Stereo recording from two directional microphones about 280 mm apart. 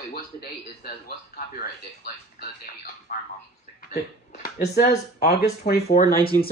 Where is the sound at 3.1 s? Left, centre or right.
Left.